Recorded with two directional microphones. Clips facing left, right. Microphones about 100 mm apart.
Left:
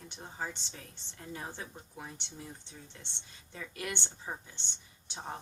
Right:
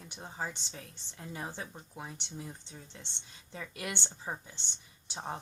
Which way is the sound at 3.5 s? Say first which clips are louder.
Even; 15° right (ahead or behind).